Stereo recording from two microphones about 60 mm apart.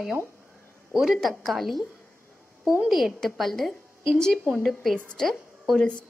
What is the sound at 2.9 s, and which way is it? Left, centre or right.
Speech, centre.